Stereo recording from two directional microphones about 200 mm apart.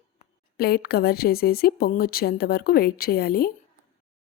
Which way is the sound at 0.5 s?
50° left (ahead or behind).